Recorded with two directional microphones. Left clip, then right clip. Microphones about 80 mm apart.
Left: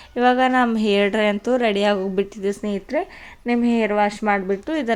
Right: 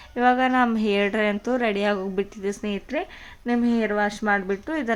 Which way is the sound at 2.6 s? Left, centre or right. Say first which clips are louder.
Left 4 dB; left.